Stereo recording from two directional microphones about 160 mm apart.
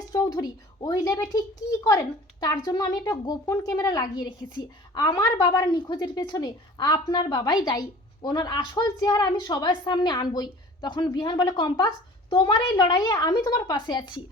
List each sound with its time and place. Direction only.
0.1 s a woman's voice: 25° left (ahead or behind)